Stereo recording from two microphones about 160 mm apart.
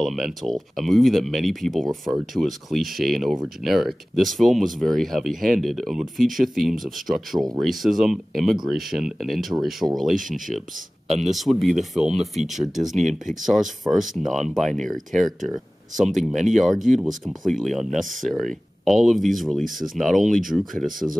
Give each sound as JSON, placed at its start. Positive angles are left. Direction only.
{"t": 0.0, "sound": "speech", "side_deg": 0}
{"t": 10.1, "sound": "speech", "side_deg": -55}
{"t": 11.1, "sound": "speech", "side_deg": 0}
{"t": 14.1, "sound": "speech", "side_deg": 0}